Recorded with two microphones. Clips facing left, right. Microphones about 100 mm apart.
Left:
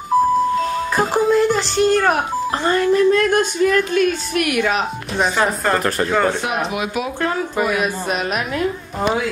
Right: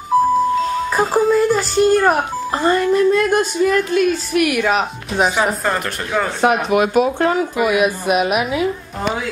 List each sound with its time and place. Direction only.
0.1 s music: centre (ahead or behind)
0.9 s speech: centre (ahead or behind)
6.4 s speech: 50° right (ahead or behind)
7.0 s speech: 30° right (ahead or behind)
7.5 s a woman's voice: 10° right (ahead or behind)